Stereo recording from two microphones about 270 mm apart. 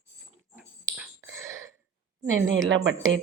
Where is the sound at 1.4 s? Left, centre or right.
Centre.